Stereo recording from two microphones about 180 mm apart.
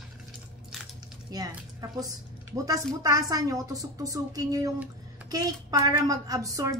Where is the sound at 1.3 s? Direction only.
20° right (ahead or behind).